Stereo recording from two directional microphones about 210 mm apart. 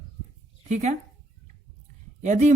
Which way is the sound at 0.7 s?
35° right (ahead or behind).